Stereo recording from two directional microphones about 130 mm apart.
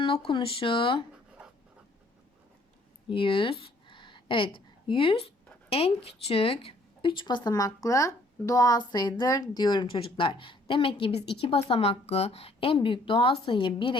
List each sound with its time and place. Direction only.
0.0 s speech: 40° left (ahead or behind)
1.4 s writing: 5° right (ahead or behind)
3.1 s speech: 40° left (ahead or behind)